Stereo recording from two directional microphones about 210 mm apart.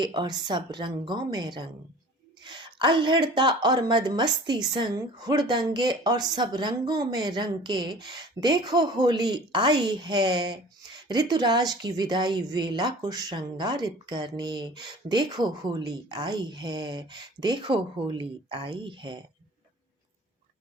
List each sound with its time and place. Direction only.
0.0 s speech: 20° right (ahead or behind)